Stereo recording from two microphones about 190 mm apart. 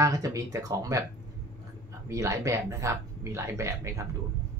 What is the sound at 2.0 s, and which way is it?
Speech, 15° right (ahead or behind).